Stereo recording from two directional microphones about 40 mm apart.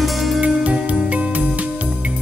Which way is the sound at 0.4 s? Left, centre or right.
Right.